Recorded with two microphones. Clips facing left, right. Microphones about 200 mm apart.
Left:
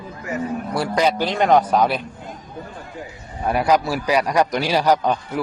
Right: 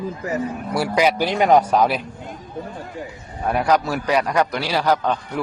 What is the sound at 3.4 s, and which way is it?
A man's voice, 5° left (ahead or behind).